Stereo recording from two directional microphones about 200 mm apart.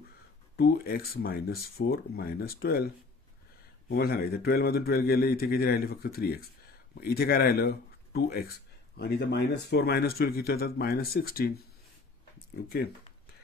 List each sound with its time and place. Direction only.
0.6 s speech: 50° left (ahead or behind)
3.9 s speech: 50° left (ahead or behind)